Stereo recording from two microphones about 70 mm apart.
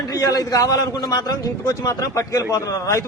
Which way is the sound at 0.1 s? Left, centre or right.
Left.